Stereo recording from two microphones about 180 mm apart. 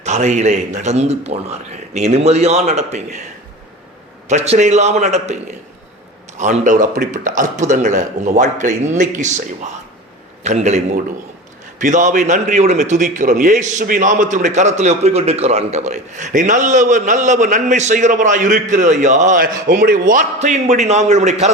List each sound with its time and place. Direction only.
0.0 s a man's voice: 40° right (ahead or behind)
4.3 s a man's voice: 40° right (ahead or behind)
10.4 s a man's voice: 40° right (ahead or behind)